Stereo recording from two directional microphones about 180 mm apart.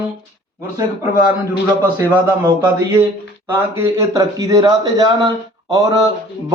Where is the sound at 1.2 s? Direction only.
10° right (ahead or behind).